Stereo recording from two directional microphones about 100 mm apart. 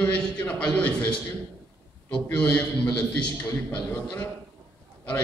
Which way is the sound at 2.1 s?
10° left (ahead or behind).